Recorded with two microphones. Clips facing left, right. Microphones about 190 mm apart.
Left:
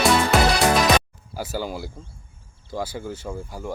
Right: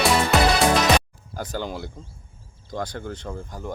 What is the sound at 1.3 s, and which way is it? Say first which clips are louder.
Speech: left 1 dB; 5° left (ahead or behind).